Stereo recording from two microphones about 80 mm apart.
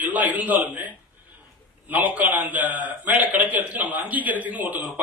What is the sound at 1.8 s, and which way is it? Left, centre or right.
Speech, right.